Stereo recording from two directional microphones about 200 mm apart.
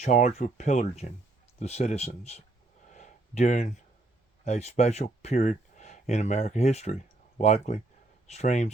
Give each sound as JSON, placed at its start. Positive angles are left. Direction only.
{"t": 0.0, "sound": "speech", "side_deg": 35}
{"t": 2.9, "sound": "a sound", "side_deg": 35}
{"t": 4.4, "sound": "speech", "side_deg": 35}